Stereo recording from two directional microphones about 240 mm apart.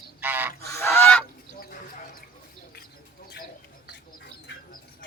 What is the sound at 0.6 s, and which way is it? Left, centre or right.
Goose, centre.